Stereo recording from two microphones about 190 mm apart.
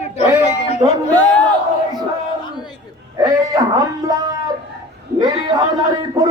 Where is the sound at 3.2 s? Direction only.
20° right (ahead or behind).